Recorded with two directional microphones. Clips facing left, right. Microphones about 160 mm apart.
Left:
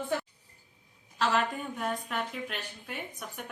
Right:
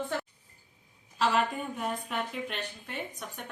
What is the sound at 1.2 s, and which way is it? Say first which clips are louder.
A woman's voice: right 1 dB; centre (ahead or behind).